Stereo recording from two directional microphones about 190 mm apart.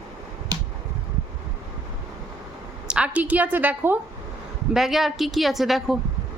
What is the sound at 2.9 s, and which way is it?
A woman's voice, 5° right (ahead or behind).